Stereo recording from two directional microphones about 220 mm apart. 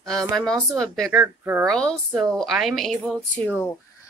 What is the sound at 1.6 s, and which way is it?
A woman's voice, 5° left (ahead or behind).